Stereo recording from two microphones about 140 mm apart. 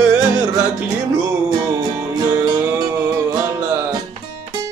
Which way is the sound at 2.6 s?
15° right (ahead or behind).